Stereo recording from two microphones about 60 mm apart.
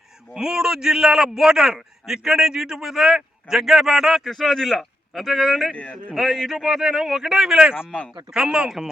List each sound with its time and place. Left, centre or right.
0.3 s a man's voice: centre
5.7 s speech: left
6.1 s a man's voice: centre